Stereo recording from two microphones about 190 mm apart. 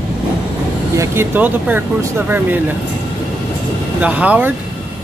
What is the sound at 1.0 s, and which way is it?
Speech, 10° right (ahead or behind).